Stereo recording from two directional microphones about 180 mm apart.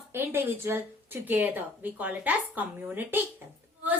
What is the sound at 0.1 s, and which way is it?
A woman's voice, 10° right (ahead or behind).